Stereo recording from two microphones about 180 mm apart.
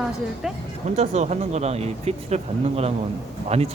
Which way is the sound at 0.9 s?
40° right (ahead or behind).